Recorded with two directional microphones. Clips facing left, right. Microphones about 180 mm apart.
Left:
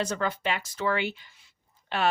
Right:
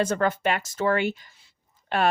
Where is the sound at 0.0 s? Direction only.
50° right (ahead or behind).